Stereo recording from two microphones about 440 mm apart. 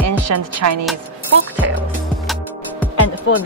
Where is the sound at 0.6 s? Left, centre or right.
Right.